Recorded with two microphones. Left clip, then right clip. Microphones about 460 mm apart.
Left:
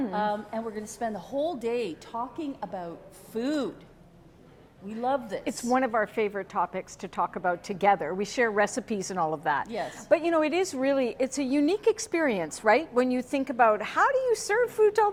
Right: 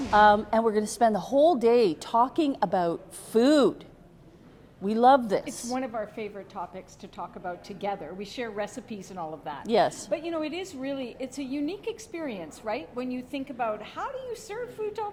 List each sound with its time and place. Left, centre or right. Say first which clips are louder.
0.1 s a woman's voice: right 10 dB; right
4.9 s a woman's voice: right 9 dB; right
5.5 s a woman's voice: left 7 dB; left
9.6 s a woman's voice: right 10 dB; right
10.1 s a woman's voice: left 7 dB; left